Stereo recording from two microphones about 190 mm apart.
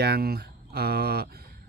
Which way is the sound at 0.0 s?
55° right (ahead or behind).